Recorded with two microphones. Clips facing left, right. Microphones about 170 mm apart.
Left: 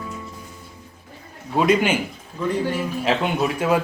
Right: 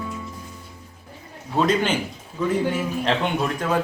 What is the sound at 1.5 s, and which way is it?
Speech, 10° left (ahead or behind).